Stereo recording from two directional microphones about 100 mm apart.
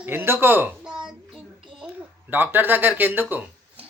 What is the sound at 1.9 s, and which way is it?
Speech, 20° right (ahead or behind).